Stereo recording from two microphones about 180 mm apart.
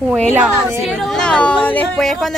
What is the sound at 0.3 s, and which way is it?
Speech, 5° right (ahead or behind).